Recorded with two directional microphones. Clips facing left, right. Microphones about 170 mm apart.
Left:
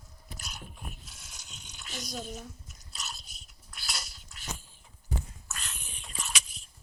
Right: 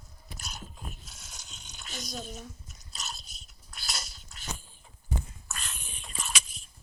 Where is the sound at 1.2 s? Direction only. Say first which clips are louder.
Right 1 dB; 45° right (ahead or behind).